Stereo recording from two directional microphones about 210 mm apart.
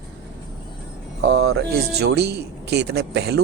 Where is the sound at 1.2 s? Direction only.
60° right (ahead or behind).